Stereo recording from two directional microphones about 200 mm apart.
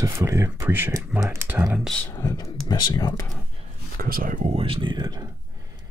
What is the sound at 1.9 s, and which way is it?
Speech, 10° left (ahead or behind).